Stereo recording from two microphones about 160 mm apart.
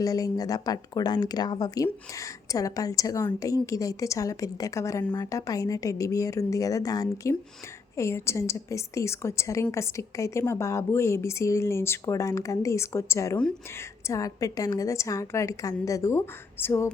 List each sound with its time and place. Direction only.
0.0 s a woman's voice: 20° left (ahead or behind)